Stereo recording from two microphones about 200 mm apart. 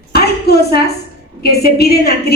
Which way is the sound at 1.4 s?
50° left (ahead or behind).